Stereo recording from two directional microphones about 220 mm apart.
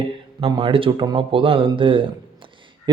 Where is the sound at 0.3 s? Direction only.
20° right (ahead or behind).